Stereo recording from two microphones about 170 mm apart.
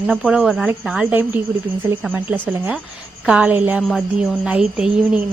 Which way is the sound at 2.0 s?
10° right (ahead or behind).